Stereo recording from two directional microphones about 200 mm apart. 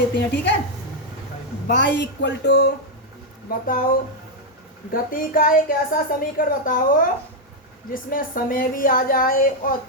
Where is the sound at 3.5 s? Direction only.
45° left (ahead or behind).